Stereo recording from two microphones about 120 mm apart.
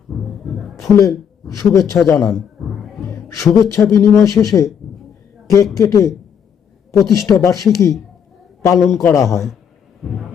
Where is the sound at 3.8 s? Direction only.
10° left (ahead or behind).